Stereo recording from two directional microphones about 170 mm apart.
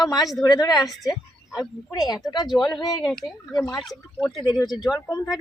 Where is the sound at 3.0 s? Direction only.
Centre (ahead or behind).